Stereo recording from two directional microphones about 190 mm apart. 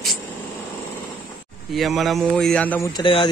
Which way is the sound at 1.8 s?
Centre (ahead or behind).